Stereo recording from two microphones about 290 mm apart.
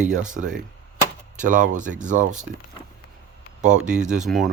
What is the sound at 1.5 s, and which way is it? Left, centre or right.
Speech, right.